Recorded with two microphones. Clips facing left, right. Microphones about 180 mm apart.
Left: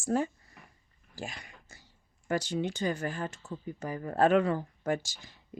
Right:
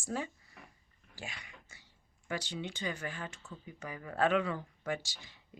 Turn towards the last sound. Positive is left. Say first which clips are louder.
# left 6 dB
turn(degrees=45)  # may be behind; listen again after turning